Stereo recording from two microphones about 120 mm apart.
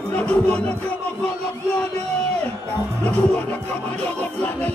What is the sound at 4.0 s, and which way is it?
Music, 10° left (ahead or behind).